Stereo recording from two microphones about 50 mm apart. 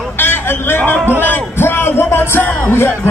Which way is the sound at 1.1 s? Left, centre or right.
Left.